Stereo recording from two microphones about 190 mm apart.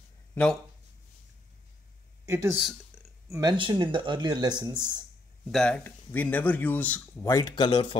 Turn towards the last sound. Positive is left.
turn(degrees=25)  # may be behind; listen again after turning